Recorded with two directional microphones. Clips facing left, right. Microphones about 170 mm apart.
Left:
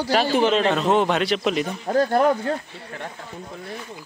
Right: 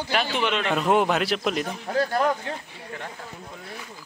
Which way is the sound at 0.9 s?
5° right (ahead or behind).